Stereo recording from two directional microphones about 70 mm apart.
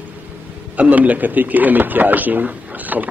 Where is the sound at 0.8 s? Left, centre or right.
Right.